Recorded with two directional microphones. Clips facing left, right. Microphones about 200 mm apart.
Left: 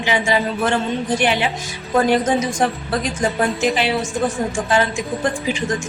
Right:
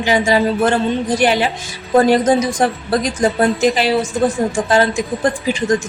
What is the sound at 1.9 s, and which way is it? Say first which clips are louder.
A woman's voice: right 4 dB; 35° right (ahead or behind).